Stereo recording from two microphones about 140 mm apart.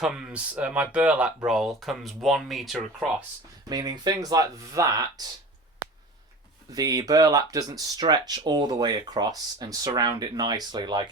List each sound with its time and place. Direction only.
0.0 s speech: 5° right (ahead or behind)
3.7 s speech: 30° right (ahead or behind)
6.7 s speech: 25° right (ahead or behind)